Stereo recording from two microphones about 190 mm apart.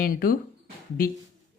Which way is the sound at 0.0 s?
50° left (ahead or behind).